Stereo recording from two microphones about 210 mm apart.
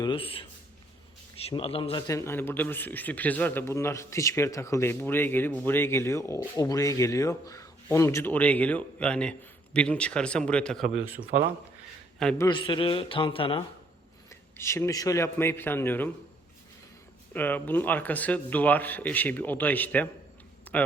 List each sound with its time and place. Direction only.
0.0 s a man's voice: 25° left (ahead or behind)
1.5 s a man's voice: 25° left (ahead or behind); by 10.8 s 5° left (ahead or behind)
11.2 s speech: 35° right (ahead or behind)
12.2 s speech: 5° left (ahead or behind)
12.5 s a man's voice: 20° left (ahead or behind)
14.3 s a man's voice: 15° left (ahead or behind)
17.3 s a man's voice: 10° left (ahead or behind)
20.7 s a sound: 10° left (ahead or behind)